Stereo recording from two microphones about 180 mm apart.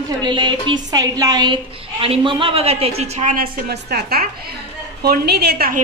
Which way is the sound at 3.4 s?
60° right (ahead or behind).